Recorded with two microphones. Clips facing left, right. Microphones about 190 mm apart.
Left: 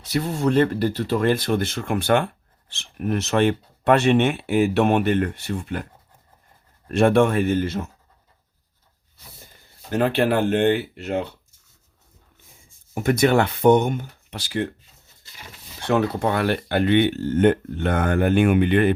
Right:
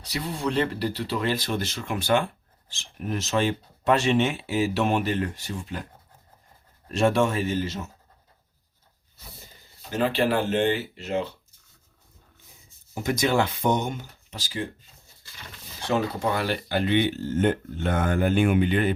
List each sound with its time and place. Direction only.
0.1 s speech: 45° left (ahead or behind)
9.9 s speech: 60° left (ahead or behind)
12.9 s speech: 60° left (ahead or behind)
15.8 s speech: 60° left (ahead or behind)